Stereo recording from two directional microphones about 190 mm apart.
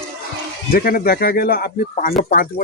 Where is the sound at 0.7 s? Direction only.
50° left (ahead or behind).